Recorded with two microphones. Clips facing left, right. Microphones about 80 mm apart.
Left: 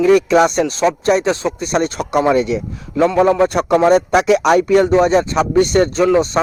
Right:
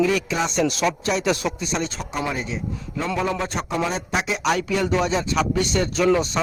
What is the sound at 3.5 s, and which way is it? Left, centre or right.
Speech, left.